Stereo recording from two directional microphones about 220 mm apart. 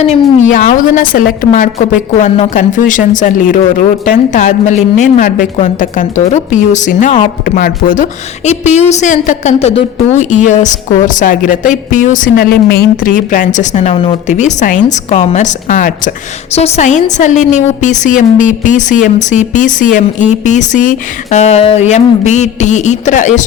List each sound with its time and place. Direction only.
0.0 s a woman's voice: 30° left (ahead or behind)